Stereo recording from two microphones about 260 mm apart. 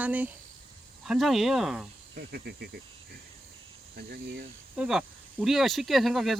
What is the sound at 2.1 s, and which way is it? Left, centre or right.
Speech, right.